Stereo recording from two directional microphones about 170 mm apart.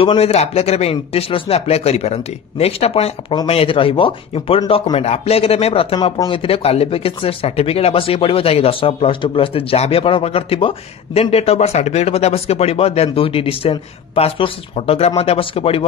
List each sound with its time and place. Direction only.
0.0 s speech: 35° left (ahead or behind)